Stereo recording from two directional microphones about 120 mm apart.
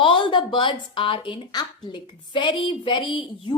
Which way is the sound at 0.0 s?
40° left (ahead or behind).